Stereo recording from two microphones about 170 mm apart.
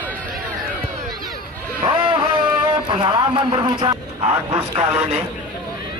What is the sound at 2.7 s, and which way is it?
Speech, 30° right (ahead or behind).